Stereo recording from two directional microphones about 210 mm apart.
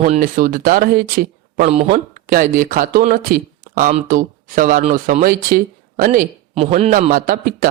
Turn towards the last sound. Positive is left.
turn(degrees=-40)  # may be behind; listen again after turning